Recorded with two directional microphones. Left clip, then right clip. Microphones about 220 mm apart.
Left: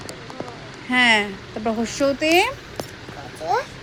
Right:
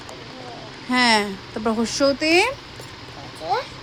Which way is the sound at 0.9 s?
10° right (ahead or behind).